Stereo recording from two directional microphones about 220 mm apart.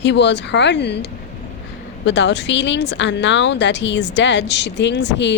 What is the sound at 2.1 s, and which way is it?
A woman's voice, 55° left (ahead or behind).